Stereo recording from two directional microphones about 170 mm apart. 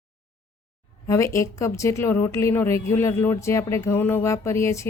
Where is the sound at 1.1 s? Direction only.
15° left (ahead or behind).